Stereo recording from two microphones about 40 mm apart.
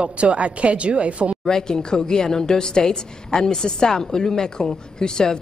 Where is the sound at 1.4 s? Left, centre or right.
Centre.